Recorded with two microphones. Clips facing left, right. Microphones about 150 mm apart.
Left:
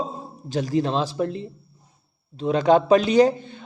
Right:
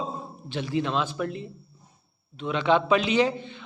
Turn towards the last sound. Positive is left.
turn(degrees=40)  # may be behind; listen again after turning